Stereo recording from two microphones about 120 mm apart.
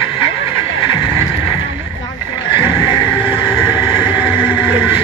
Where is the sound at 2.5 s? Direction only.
45° left (ahead or behind).